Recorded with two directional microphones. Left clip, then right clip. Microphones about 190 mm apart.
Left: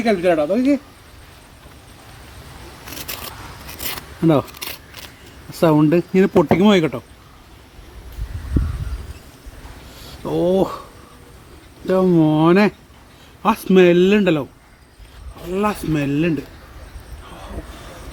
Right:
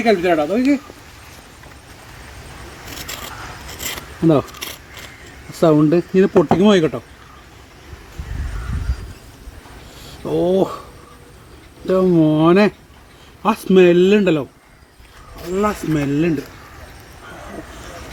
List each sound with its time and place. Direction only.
0.0 s speech: 15° left (ahead or behind)
3.0 s a sound: centre (ahead or behind)
5.5 s speech: 20° left (ahead or behind)
10.2 s speech: 15° left (ahead or behind)
11.9 s speech: 10° left (ahead or behind)
15.5 s speech: 5° left (ahead or behind)